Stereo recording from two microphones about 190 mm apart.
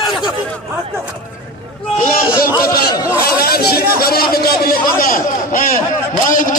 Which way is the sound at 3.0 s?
15° left (ahead or behind).